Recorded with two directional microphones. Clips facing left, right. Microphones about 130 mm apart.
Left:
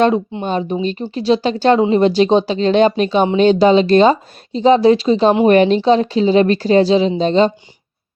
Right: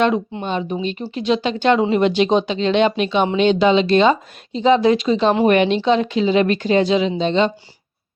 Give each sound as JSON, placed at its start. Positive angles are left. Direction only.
{"t": 0.4, "sound": "speech", "side_deg": 40}